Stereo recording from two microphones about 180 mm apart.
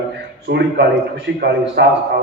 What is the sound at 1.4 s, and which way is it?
Speech, 70° right (ahead or behind).